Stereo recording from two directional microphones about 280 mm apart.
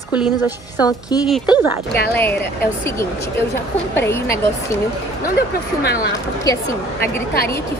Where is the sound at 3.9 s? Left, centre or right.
Centre.